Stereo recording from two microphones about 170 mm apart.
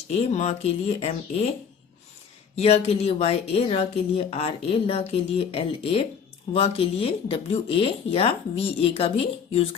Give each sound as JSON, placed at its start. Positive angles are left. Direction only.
{"t": 0.1, "sound": "speech", "side_deg": 40}
{"t": 2.6, "sound": "speech", "side_deg": 40}